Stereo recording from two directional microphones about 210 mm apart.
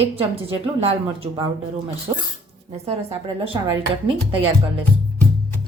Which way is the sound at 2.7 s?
30° right (ahead or behind).